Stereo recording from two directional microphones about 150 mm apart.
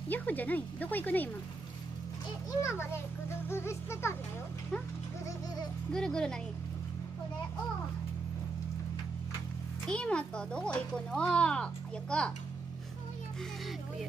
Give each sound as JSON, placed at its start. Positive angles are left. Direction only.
{"t": 0.1, "sound": "speech", "side_deg": 10}
{"t": 2.6, "sound": "speech", "side_deg": 15}
{"t": 5.9, "sound": "speech", "side_deg": 5}
{"t": 9.8, "sound": "speech", "side_deg": 5}